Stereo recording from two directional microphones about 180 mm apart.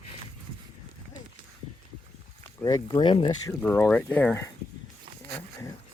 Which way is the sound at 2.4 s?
20° left (ahead or behind).